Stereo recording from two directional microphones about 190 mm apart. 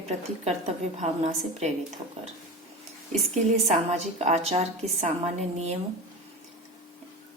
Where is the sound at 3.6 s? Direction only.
35° right (ahead or behind).